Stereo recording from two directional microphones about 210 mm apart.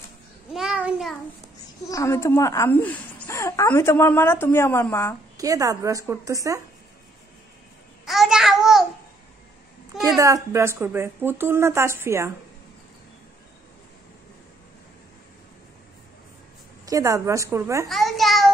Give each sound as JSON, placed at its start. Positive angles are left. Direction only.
{"t": 0.5, "sound": "a sound", "side_deg": 0}
{"t": 1.9, "sound": "speech", "side_deg": 15}
{"t": 5.4, "sound": "a woman's voice", "side_deg": -15}
{"t": 8.0, "sound": "babbling", "side_deg": 0}
{"t": 10.0, "sound": "a woman's voice", "side_deg": -15}
{"t": 16.8, "sound": "a woman's voice", "side_deg": -15}
{"t": 17.8, "sound": "a child's voice", "side_deg": 0}